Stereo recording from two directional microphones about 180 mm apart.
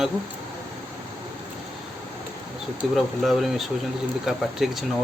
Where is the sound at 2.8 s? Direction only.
Centre (ahead or behind).